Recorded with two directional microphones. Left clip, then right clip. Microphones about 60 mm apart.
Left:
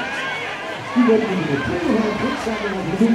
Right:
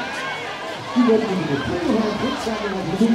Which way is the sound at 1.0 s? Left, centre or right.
Centre.